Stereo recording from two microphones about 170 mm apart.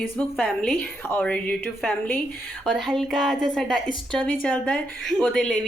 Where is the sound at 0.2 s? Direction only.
5° left (ahead or behind).